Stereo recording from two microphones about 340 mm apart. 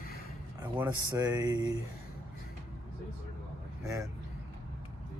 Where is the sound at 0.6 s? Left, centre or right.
Centre.